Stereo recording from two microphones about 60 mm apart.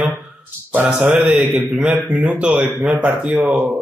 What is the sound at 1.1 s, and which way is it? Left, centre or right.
A man's voice, centre.